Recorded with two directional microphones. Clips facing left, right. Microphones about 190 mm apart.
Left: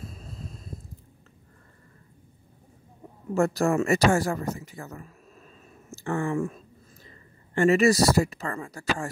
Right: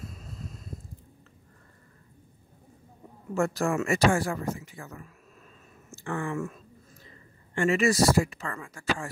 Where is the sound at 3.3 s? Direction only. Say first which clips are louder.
Left 4 dB; 35° left (ahead or behind).